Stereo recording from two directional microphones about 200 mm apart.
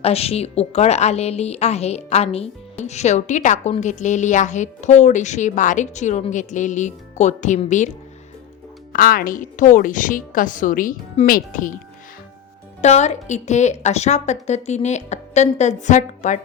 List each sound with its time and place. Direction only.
0.0 s a woman's voice: 30° left (ahead or behind)
8.9 s a woman's voice: 45° left (ahead or behind)
12.8 s a woman's voice: 35° left (ahead or behind)